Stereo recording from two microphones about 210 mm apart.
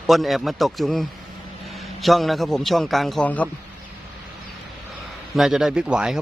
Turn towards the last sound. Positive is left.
turn(degrees=-5)  # may be behind; listen again after turning